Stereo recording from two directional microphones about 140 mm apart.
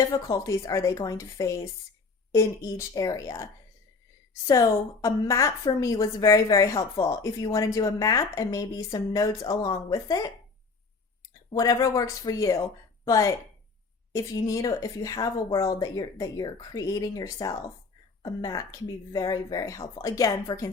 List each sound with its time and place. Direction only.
0.1 s a woman's voice: 25° left (ahead or behind)
11.5 s a woman's voice: 25° left (ahead or behind)
14.3 s a woman's voice: 25° left (ahead or behind)